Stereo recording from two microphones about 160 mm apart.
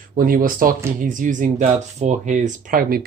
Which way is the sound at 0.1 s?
60° right (ahead or behind).